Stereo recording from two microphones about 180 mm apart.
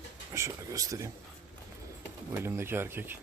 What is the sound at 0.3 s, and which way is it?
Speech, 15° right (ahead or behind).